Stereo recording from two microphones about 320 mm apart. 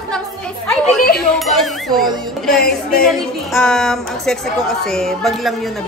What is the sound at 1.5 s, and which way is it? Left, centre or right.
Music, centre.